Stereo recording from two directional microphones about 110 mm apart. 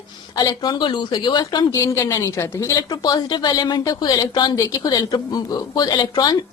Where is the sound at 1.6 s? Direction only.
30° left (ahead or behind).